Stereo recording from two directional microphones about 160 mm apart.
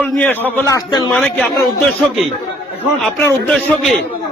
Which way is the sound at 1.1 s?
5° left (ahead or behind).